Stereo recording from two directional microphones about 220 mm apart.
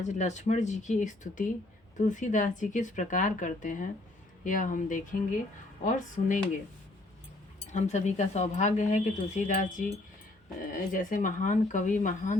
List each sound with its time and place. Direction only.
0.0 s speech: 30° left (ahead or behind)
7.7 s speech: 30° left (ahead or behind)